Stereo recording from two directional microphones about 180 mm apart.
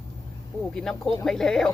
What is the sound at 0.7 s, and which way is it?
Speech, 5° left (ahead or behind).